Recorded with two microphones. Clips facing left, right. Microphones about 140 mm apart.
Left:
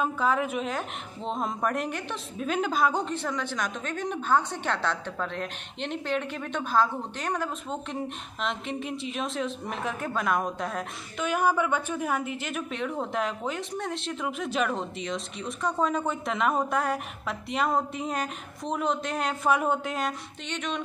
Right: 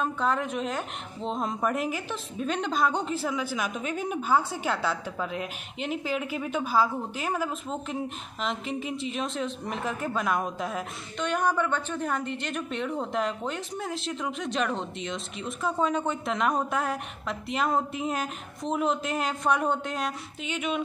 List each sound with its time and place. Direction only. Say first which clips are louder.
0.0 s a woman's voice: left 1 dB; 5° left (ahead or behind)